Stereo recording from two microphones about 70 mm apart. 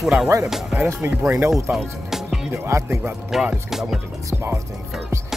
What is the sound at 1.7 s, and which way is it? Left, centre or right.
Music, centre.